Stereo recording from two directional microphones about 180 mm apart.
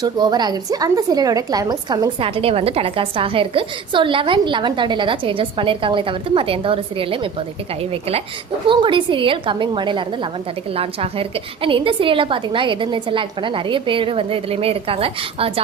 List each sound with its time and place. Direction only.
0.0 s a woman's voice: 20° right (ahead or behind)
8.6 s a woman's voice: 25° right (ahead or behind)